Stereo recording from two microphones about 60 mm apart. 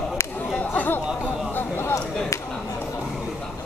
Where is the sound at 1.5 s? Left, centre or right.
Left.